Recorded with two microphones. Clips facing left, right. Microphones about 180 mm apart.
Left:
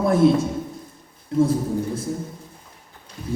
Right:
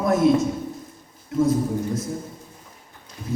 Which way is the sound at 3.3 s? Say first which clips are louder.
Even; 30° left (ahead or behind).